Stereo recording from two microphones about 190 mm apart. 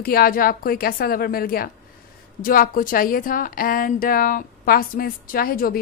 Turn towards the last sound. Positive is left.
turn(degrees=50)  # may be behind; listen again after turning